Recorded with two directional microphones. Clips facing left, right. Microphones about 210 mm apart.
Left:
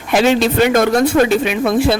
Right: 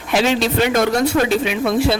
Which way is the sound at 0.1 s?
50° left (ahead or behind).